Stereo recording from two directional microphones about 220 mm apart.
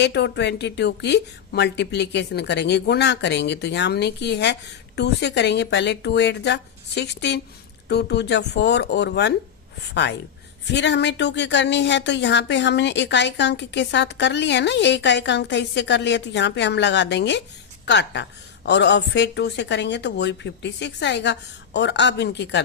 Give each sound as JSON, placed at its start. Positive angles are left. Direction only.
{"t": 0.0, "sound": "speech", "side_deg": 50}